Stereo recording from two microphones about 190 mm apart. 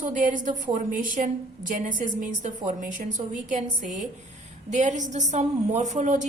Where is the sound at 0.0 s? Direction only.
45° right (ahead or behind).